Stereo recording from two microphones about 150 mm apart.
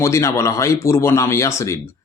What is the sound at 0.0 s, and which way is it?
Speech, 20° left (ahead or behind).